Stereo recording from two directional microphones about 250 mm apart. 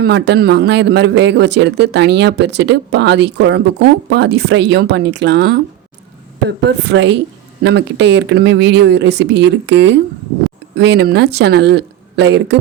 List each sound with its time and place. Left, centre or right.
0.0 s a man's voice: right
6.7 s a man's voice: right